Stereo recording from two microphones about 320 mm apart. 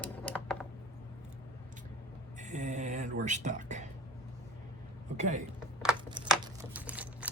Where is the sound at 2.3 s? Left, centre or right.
Right.